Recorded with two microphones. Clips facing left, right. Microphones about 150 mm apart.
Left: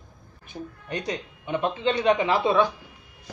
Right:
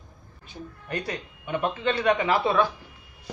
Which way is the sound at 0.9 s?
20° left (ahead or behind).